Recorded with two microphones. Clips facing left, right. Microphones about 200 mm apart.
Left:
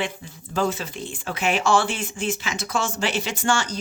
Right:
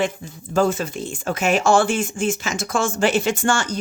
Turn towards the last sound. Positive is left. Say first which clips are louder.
# right 4 dB
turn(degrees=-50)  # may be behind; listen again after turning